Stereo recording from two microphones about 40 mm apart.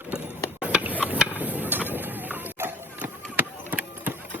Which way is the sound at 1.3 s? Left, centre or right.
Right.